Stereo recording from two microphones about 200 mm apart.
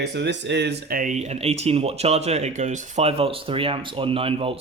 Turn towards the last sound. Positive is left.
turn(degrees=-30)  # may be behind; listen again after turning